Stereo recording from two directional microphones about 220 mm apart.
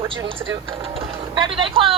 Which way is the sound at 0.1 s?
20° right (ahead or behind).